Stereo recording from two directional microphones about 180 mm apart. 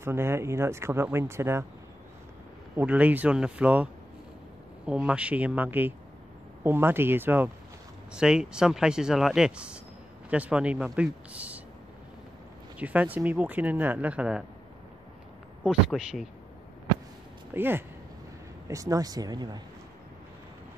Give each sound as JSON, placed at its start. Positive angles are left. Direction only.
{"t": 0.0, "sound": "speech", "side_deg": -15}
{"t": 2.7, "sound": "speech", "side_deg": -10}
{"t": 12.7, "sound": "speech", "side_deg": -10}
{"t": 15.6, "sound": "speech", "side_deg": 0}
{"t": 17.6, "sound": "speech", "side_deg": -10}